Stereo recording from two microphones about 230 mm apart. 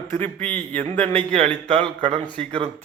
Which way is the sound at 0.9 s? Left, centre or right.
Right.